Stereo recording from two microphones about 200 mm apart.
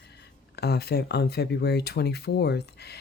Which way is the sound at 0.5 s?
55° left (ahead or behind).